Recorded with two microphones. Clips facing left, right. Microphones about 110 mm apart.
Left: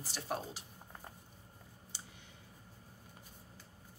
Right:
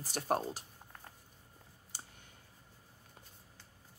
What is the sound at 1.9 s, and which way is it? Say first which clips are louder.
Clicking: right 3 dB; 45° right (ahead or behind).